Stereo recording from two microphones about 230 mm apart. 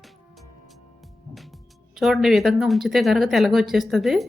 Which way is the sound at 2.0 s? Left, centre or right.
Centre.